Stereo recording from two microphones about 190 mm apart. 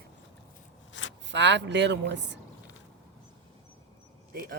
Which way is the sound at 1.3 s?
70° right (ahead or behind).